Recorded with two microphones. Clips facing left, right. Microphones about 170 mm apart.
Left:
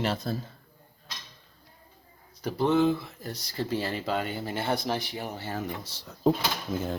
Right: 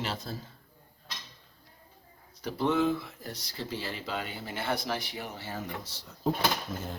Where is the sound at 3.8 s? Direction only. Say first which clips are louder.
Left 6 dB; 45° left (ahead or behind).